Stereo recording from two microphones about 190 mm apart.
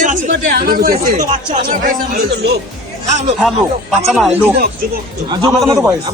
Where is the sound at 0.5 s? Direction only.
55° right (ahead or behind).